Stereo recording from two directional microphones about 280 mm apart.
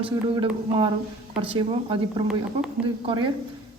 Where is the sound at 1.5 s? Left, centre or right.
Centre.